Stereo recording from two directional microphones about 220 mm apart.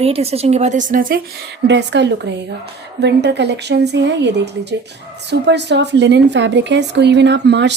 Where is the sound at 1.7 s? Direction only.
50° right (ahead or behind).